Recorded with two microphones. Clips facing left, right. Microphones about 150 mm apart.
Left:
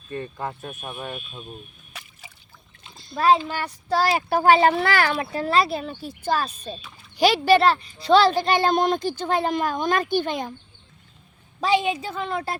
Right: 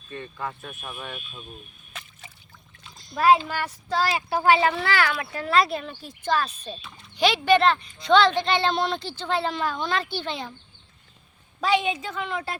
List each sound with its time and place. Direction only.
0.2 s speech: 30° left (ahead or behind)
1.9 s drip: 5° left (ahead or behind)
2.8 s a sound: 25° left (ahead or behind)
3.2 s speech: 5° right (ahead or behind)
3.9 s speech: 40° left (ahead or behind)
5.1 s speech: 30° left (ahead or behind)
5.5 s speech: 5° left (ahead or behind)
7.2 s a child's voice: 40° left (ahead or behind)
11.7 s speech: 30° left (ahead or behind)